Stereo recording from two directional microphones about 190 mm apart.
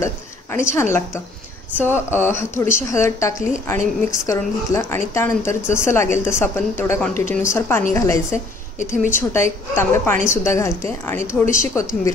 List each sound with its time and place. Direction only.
0.0 s a woman's voice: 15° left (ahead or behind)
8.7 s a woman's voice: 40° left (ahead or behind)
9.3 s a woman's voice: 15° left (ahead or behind)